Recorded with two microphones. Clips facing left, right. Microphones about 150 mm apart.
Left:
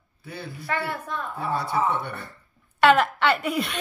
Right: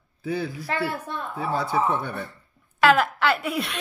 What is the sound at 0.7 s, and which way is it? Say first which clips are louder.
Speech: left 4 dB; 30° right (ahead or behind).